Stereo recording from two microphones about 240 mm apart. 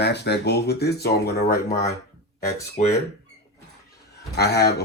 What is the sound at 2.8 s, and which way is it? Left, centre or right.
Speech, left.